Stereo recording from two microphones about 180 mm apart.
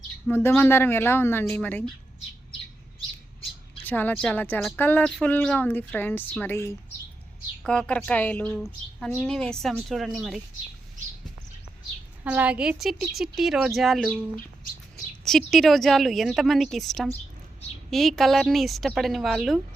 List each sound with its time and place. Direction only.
0.3 s speech: 10° left (ahead or behind)
3.8 s a woman's voice: 10° left (ahead or behind)
12.2 s a woman's voice: 10° right (ahead or behind)
15.2 s a woman's voice: centre (ahead or behind)